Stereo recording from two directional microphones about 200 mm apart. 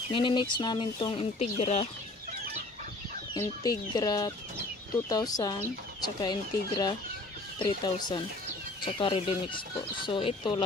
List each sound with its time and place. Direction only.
0.1 s speech: 25° left (ahead or behind)
3.3 s speech: 20° left (ahead or behind)